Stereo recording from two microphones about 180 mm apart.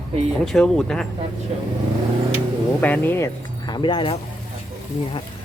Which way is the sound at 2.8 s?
10° left (ahead or behind).